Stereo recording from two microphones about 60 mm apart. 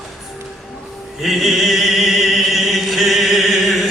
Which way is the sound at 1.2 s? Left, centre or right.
Centre.